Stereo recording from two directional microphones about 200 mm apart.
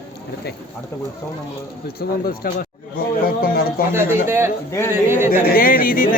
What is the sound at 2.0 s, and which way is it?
Speech, 50° left (ahead or behind).